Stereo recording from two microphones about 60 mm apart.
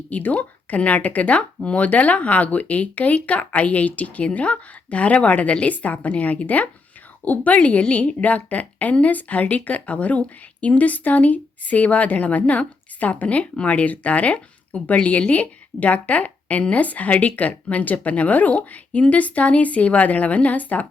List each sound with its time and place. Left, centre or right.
0.1 s a woman's voice: left